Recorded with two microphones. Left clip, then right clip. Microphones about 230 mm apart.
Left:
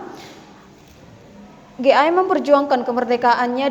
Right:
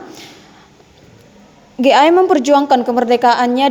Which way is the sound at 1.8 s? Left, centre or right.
Right.